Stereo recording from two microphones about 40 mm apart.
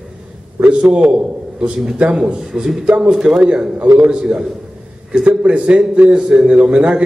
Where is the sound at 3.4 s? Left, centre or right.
Right.